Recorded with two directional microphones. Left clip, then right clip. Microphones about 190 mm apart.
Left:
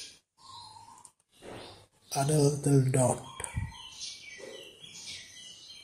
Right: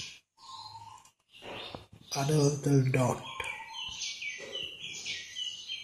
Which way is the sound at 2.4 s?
15° left (ahead or behind).